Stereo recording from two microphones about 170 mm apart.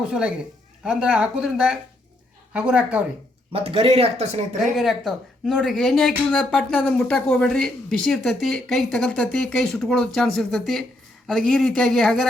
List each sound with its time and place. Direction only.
0.0 s a woman's voice: 5° right (ahead or behind)
3.5 s speech: 35° right (ahead or behind)
4.7 s speech: centre (ahead or behind)